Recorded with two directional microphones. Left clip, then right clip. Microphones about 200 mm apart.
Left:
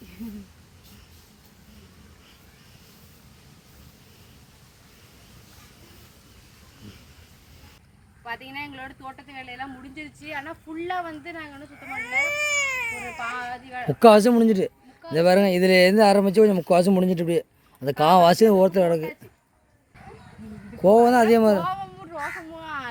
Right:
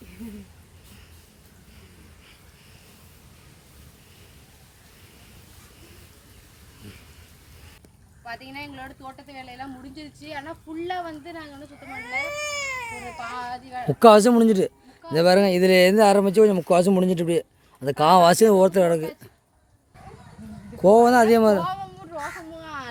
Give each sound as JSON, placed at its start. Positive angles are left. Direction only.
{"t": 8.2, "sound": "a woman's voice", "side_deg": -20}
{"t": 12.5, "sound": "baby cry", "side_deg": 0}
{"t": 13.2, "sound": "a woman's voice", "side_deg": -15}
{"t": 20.8, "sound": "baby cry", "side_deg": -5}